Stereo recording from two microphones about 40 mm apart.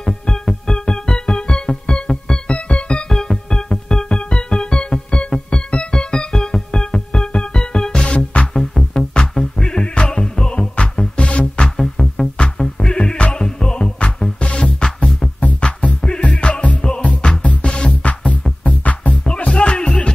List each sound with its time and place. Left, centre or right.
0.0 s keyboard: centre
3.1 s music: centre
11.7 s music: centre
18.0 s music: left
19.2 s music: left